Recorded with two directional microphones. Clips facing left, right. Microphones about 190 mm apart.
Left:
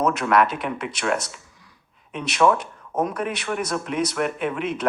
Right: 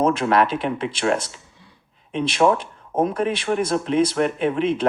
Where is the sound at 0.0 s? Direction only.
30° right (ahead or behind).